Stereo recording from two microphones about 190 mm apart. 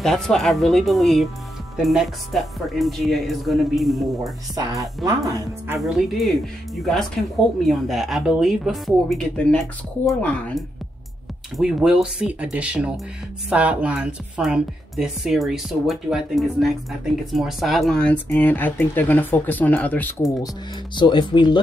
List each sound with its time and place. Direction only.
0.0 s speech: centre (ahead or behind)
4.2 s speech: 20° right (ahead or behind)
5.8 s speech: centre (ahead or behind)
20.9 s speech: 25° left (ahead or behind)